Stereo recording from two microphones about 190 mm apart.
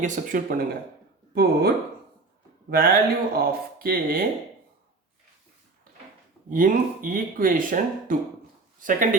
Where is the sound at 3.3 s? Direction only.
50° right (ahead or behind).